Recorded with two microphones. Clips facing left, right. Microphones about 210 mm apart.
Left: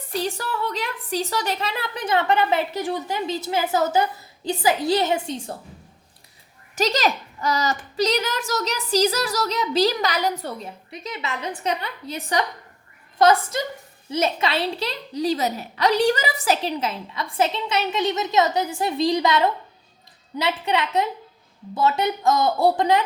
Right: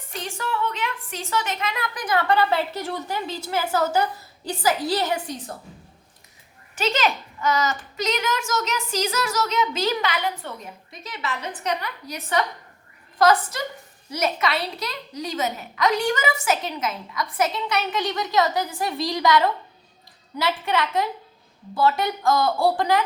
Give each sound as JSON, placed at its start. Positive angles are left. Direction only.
{"t": 0.1, "sound": "a woman's voice", "side_deg": 35}
{"t": 6.7, "sound": "a child's voice", "side_deg": 40}
{"t": 11.3, "sound": "a woman's voice", "side_deg": 25}